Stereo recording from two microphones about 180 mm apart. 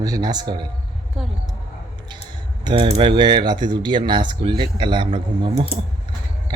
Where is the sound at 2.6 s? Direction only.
30° right (ahead or behind).